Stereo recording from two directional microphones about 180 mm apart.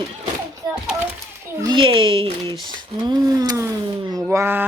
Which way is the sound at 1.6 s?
25° right (ahead or behind).